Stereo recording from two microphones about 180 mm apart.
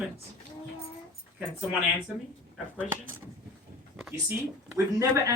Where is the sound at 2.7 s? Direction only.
10° right (ahead or behind).